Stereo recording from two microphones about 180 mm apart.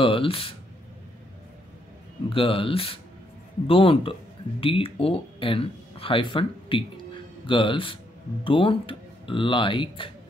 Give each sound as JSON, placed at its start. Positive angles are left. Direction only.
{"t": 0.0, "sound": "speech", "side_deg": 30}
{"t": 2.2, "sound": "speech", "side_deg": 30}